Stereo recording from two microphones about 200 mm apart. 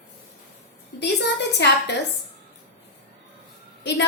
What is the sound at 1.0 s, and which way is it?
A woman's voice, 60° left (ahead or behind).